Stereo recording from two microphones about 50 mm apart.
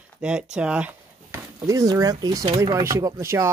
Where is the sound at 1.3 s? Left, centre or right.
Right.